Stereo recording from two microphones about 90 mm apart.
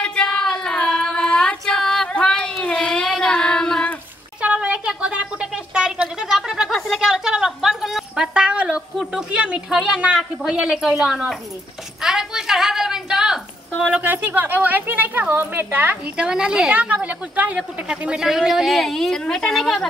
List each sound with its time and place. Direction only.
0.0 s female singing: 10° left (ahead or behind)
4.4 s a sound: 15° right (ahead or behind)
8.9 s speech: centre (ahead or behind)
9.3 s a woman's voice: 10° right (ahead or behind)
16.3 s a woman's voice: 10° right (ahead or behind)